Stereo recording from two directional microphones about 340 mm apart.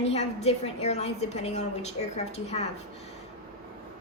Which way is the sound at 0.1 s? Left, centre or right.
Centre.